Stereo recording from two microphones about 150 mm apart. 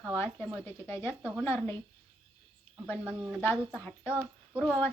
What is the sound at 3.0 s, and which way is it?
Speech, 10° right (ahead or behind).